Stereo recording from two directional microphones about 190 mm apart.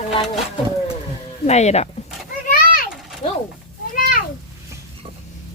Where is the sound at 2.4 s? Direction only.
45° left (ahead or behind).